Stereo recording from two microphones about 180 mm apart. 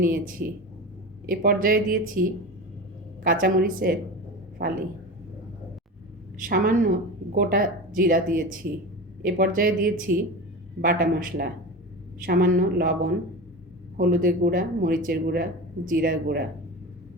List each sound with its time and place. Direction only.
0.0 s speech: 50° right (ahead or behind)
3.2 s a man's voice: 50° right (ahead or behind)
6.4 s speech: 50° right (ahead or behind)